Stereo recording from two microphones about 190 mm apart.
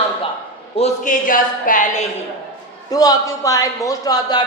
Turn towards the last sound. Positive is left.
turn(degrees=20)  # may be behind; listen again after turning